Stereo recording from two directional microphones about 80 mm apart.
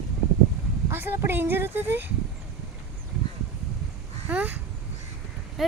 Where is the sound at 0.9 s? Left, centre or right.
Right.